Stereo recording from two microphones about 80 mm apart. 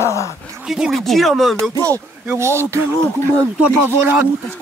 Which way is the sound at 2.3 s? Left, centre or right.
Right.